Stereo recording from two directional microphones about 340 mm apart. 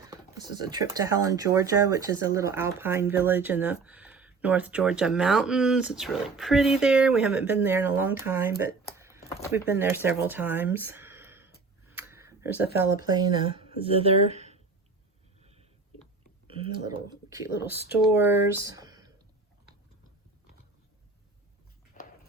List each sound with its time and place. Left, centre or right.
0.0 s speech: centre
9.0 s a sound: centre
13.1 s speech: centre
15.4 s a sound: centre
16.5 s speech: centre
22.0 s horse: left